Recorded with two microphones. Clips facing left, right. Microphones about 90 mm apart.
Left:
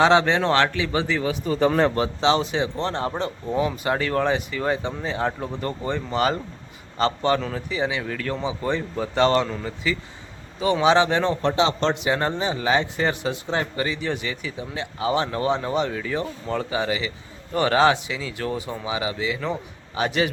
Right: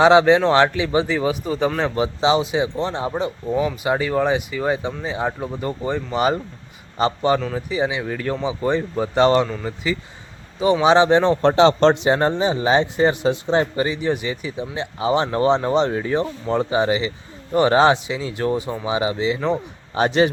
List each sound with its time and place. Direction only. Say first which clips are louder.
0.0 s speech: right 5 dB; 15° right (ahead or behind)
11.4 s speech: right 9 dB; 40° right (ahead or behind); by 19.5 s 25° right (ahead or behind)
19.9 s a man's voice: right 6 dB; 35° right (ahead or behind)